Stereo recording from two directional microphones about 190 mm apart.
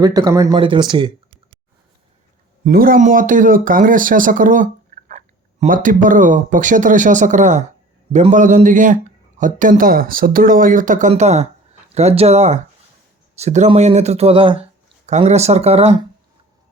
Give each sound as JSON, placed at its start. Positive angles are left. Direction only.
{"t": 0.0, "sound": "speech", "side_deg": -20}
{"t": 2.6, "sound": "speech", "side_deg": -50}